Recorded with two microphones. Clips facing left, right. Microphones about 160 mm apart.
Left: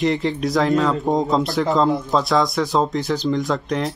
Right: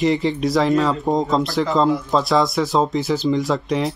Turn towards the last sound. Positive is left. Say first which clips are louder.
# right 2 dB
turn(degrees=0)  # may be behind; listen again after turning